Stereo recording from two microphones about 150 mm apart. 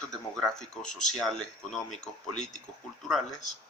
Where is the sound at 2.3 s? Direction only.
50° left (ahead or behind).